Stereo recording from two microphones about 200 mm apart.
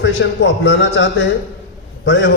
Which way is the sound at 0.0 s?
65° left (ahead or behind).